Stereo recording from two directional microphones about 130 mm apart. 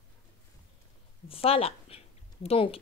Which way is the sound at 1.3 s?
45° left (ahead or behind).